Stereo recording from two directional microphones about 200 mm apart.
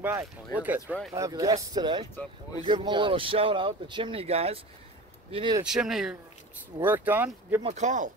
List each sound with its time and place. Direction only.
0.0 s speech: 10° right (ahead or behind)
5.7 s speech: 5° right (ahead or behind)
7.6 s speech: 35° right (ahead or behind)